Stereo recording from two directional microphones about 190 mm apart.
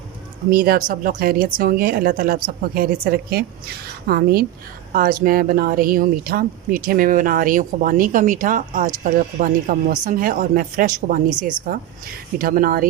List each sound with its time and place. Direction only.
0.5 s speech: 50° right (ahead or behind)